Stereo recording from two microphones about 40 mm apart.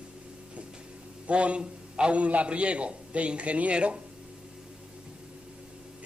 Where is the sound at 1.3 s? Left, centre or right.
Right.